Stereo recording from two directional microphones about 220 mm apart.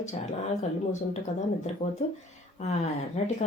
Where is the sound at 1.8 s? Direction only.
35° left (ahead or behind).